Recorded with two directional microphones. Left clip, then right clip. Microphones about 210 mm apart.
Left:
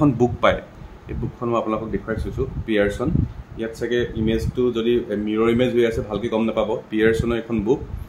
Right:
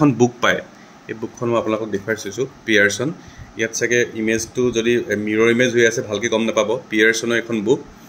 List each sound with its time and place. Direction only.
0.0 s speech: centre (ahead or behind)